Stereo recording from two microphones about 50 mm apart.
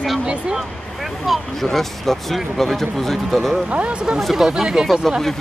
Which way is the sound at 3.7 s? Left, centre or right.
Right.